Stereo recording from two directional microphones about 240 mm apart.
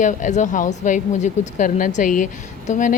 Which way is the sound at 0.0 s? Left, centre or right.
Left.